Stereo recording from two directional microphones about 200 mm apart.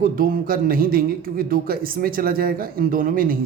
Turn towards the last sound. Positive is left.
turn(degrees=-45)  # may be behind; listen again after turning